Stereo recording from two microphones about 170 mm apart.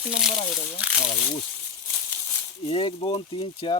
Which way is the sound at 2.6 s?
35° left (ahead or behind).